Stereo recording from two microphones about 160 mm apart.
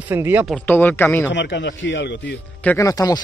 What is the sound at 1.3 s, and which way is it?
Speech, 90° left.